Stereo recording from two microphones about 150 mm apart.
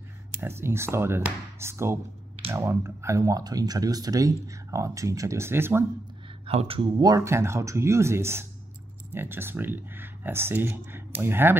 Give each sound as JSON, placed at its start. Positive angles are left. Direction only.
{"t": 0.3, "sound": "speech", "side_deg": -15}
{"t": 6.4, "sound": "speech", "side_deg": -40}
{"t": 7.0, "sound": "speech", "side_deg": -20}